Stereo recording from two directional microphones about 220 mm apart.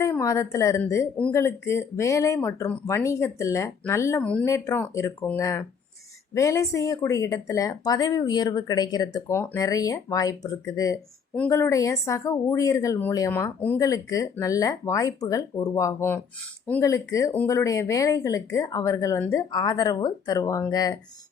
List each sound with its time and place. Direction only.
0.0 s speech: 15° left (ahead or behind)